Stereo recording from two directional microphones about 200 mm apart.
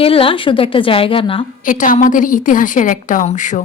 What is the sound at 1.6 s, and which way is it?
A woman's voice, 40° left (ahead or behind).